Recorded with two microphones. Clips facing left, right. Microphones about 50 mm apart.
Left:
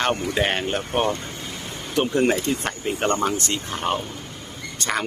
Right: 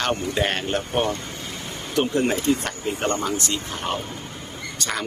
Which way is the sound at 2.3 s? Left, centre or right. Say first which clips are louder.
Right 1 dB; left.